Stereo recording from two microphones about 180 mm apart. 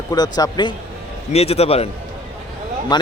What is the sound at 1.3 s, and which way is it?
Speech, 35° left (ahead or behind).